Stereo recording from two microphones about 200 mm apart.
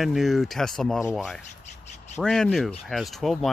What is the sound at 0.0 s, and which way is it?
Speech, centre (ahead or behind).